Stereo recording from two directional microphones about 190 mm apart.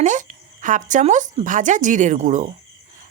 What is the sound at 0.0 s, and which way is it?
Speech, 40° right (ahead or behind).